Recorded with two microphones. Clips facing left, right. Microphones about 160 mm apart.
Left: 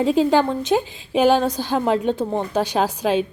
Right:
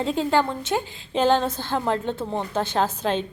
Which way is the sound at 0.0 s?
15° left (ahead or behind).